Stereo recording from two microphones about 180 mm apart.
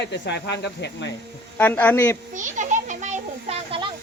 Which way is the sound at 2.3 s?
45° right (ahead or behind).